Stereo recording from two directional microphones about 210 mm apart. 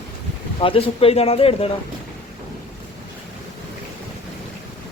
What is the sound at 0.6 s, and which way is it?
Speech, 25° left (ahead or behind).